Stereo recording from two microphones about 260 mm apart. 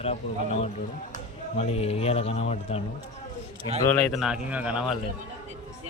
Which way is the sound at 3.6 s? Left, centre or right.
Right.